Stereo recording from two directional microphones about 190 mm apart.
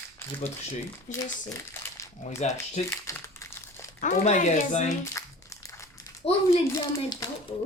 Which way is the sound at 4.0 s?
40° left (ahead or behind).